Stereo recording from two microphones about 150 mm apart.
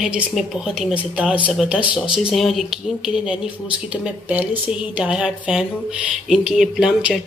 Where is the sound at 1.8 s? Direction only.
30° left (ahead or behind).